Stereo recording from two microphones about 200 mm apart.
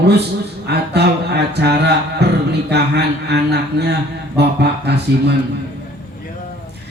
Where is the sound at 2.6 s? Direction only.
55° right (ahead or behind).